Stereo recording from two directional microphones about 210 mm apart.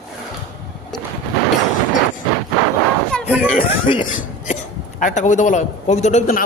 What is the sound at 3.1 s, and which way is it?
Chatter, centre (ahead or behind).